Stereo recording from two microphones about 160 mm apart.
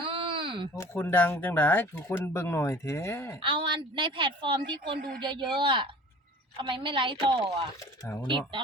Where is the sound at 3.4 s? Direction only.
30° right (ahead or behind).